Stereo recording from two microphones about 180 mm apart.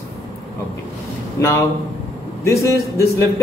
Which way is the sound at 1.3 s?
15° left (ahead or behind).